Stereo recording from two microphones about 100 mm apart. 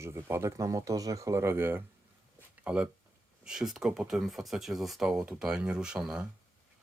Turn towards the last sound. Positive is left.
turn(degrees=-5)  # may be behind; listen again after turning